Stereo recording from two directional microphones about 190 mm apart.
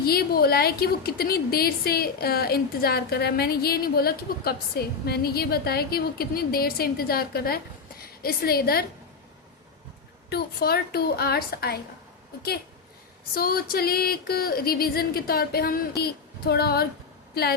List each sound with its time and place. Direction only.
0.0 s a woman's voice: 55° left (ahead or behind)
10.2 s a woman's voice: 55° left (ahead or behind)
13.3 s a woman's voice: 50° left (ahead or behind)